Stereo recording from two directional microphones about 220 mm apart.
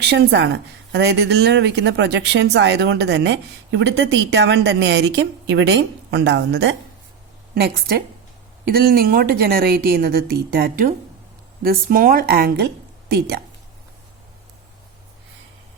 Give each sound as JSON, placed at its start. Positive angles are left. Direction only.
{"t": 0.0, "sound": "a woman's voice", "side_deg": -50}